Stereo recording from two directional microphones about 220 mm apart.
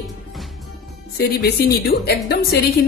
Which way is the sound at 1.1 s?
45° left (ahead or behind).